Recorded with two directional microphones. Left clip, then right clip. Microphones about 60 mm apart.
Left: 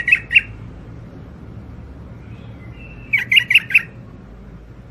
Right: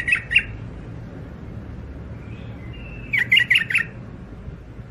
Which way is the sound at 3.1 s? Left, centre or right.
Left.